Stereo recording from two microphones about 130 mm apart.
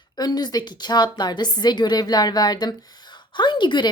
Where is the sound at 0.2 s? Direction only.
30° left (ahead or behind).